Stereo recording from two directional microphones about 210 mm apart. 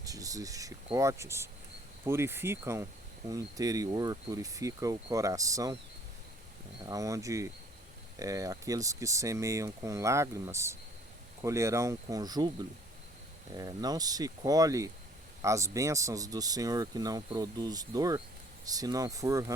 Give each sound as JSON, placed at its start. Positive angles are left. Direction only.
{"t": 0.0, "sound": "speech", "side_deg": -15}
{"t": 6.8, "sound": "speech", "side_deg": -15}
{"t": 13.5, "sound": "speech", "side_deg": -20}